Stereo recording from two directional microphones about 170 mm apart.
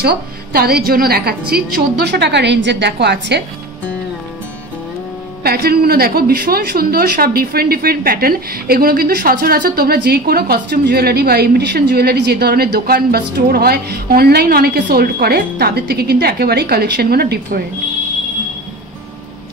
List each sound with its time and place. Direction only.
0.0 s a woman's voice: 65° right (ahead or behind)
1.5 s a woman's voice: 80° right
5.4 s a woman's voice: 65° right (ahead or behind)